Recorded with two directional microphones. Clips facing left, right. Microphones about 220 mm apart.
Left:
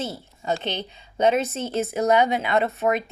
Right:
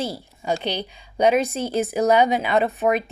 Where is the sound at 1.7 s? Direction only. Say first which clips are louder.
Right 1 dB; 15° right (ahead or behind).